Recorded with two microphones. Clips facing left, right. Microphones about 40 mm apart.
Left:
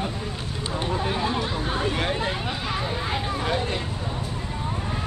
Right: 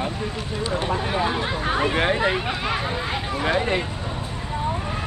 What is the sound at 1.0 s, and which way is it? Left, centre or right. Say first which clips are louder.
Speech: right 2 dB; right.